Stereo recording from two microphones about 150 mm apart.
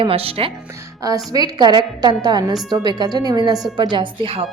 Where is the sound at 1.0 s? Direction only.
25° right (ahead or behind).